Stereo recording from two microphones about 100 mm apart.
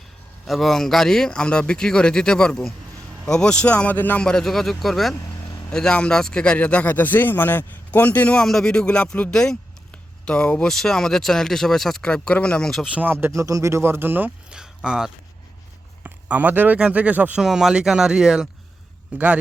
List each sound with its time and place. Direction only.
0.4 s speech: centre (ahead or behind)
12.8 s speech: 15° right (ahead or behind)
14.5 s speech: 5° right (ahead or behind)
16.0 s speech: 15° right (ahead or behind)
17.4 s a man's voice: 5° right (ahead or behind)